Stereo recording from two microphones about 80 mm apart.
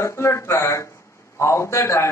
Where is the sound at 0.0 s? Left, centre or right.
Left.